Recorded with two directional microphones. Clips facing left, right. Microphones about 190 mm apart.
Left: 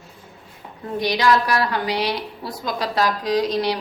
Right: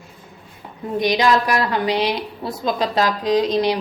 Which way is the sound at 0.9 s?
20° right (ahead or behind).